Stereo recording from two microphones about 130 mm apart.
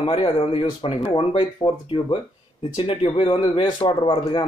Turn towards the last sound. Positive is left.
turn(degrees=40)  # may be behind; listen again after turning